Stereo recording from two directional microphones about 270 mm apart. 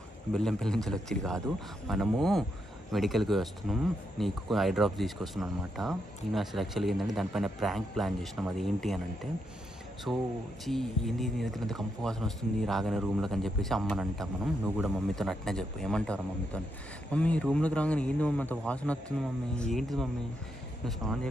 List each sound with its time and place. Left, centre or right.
0.3 s speech: centre